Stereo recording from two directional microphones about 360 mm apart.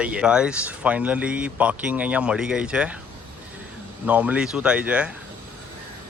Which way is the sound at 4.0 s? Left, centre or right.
Centre.